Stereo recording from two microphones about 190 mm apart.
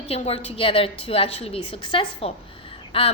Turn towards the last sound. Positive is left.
turn(degrees=30)  # may be behind; listen again after turning